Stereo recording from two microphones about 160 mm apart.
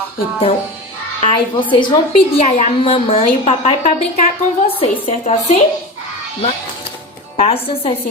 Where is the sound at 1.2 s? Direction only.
30° left (ahead or behind).